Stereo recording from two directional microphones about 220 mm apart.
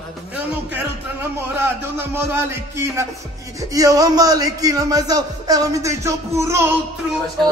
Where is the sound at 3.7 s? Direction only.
15° right (ahead or behind).